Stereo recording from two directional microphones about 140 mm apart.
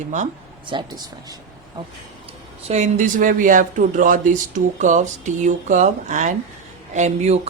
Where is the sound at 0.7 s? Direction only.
30° right (ahead or behind).